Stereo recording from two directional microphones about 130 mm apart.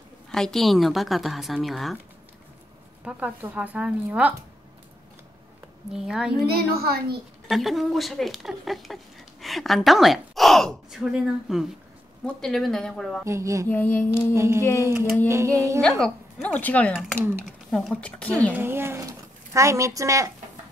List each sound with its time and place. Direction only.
0.3 s speech: 5° left (ahead or behind)
3.1 s speech: 10° right (ahead or behind)
5.9 s speech: 5° right (ahead or behind)
7.4 s speech: centre (ahead or behind)
13.2 s a sound: 25° right (ahead or behind)
13.7 s speech: 15° left (ahead or behind)
14.3 s a sound: 20° right (ahead or behind)
15.8 s speech: 5° left (ahead or behind)
16.9 s speech: 5° right (ahead or behind)
17.7 s speech: 5° left (ahead or behind)
18.5 s speech: 20° right (ahead or behind)